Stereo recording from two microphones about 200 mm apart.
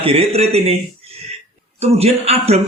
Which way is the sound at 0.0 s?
30° right (ahead or behind).